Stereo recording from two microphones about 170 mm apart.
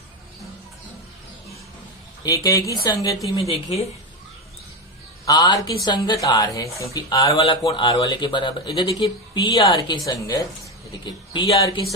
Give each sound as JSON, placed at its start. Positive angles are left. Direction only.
{"t": 2.2, "sound": "speech", "side_deg": 20}
{"t": 3.3, "sound": "speech", "side_deg": 35}
{"t": 5.2, "sound": "speech", "side_deg": 25}